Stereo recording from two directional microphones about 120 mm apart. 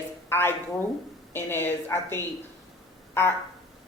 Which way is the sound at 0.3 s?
20° left (ahead or behind).